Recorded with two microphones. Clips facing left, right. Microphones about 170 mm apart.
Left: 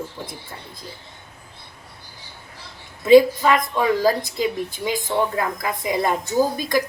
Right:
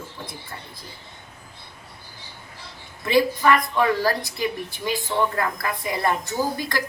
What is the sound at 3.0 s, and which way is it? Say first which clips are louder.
A woman's voice: left 7 dB; 20° left (ahead or behind).